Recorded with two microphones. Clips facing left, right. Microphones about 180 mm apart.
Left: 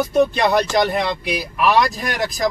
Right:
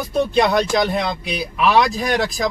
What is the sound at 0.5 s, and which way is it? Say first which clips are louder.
Speech: left 1 dB; centre (ahead or behind).